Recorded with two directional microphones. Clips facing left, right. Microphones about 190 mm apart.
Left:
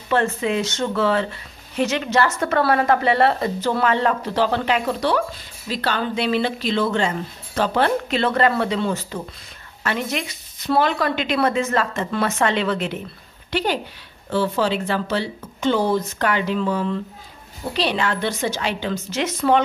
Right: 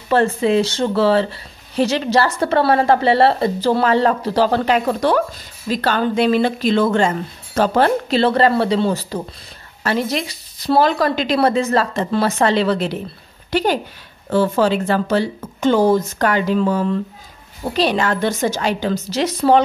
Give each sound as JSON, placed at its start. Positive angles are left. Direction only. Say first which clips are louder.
{"t": 0.1, "sound": "speech", "louder": "right 5 dB", "side_deg": -35}